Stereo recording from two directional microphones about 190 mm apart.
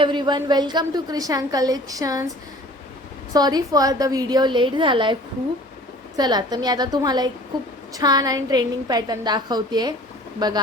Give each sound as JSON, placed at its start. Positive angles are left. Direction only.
{"t": 0.0, "sound": "a woman's voice", "side_deg": -25}
{"t": 3.3, "sound": "a woman's voice", "side_deg": -20}
{"t": 6.1, "sound": "a woman's voice", "side_deg": -20}